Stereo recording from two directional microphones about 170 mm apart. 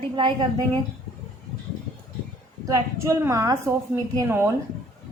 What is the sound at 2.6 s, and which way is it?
A woman's voice, 20° right (ahead or behind).